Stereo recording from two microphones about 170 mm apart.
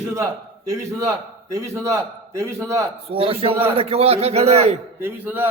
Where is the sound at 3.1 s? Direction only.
35° right (ahead or behind).